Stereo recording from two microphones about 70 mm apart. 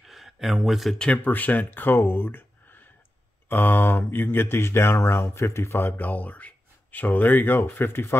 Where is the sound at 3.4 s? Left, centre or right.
Left.